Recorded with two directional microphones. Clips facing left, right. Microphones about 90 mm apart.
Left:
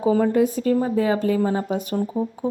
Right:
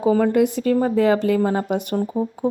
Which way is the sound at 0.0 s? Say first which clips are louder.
Right 1 dB; 65° right (ahead or behind).